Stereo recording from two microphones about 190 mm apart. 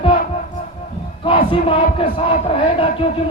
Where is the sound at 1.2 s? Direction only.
30° left (ahead or behind).